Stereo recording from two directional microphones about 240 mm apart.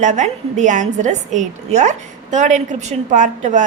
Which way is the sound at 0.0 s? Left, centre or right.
Right.